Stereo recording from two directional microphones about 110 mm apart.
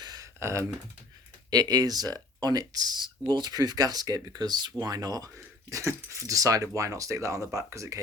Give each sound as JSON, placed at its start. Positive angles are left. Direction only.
{"t": 0.0, "sound": "computer keyboard", "side_deg": -40}
{"t": 0.3, "sound": "speech", "side_deg": -25}
{"t": 1.5, "sound": "speech", "side_deg": -35}